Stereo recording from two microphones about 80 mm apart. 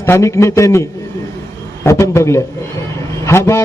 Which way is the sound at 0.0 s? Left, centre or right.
Left.